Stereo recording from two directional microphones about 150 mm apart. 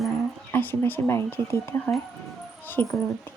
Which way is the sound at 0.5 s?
15° left (ahead or behind).